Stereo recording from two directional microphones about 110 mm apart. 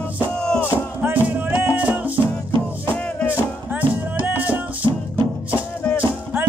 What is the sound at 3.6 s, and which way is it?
Music, 15° right (ahead or behind).